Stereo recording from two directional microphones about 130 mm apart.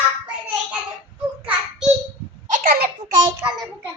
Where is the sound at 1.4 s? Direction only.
5° right (ahead or behind).